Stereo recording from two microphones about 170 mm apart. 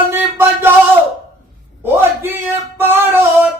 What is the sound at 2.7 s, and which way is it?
Music, 15° right (ahead or behind).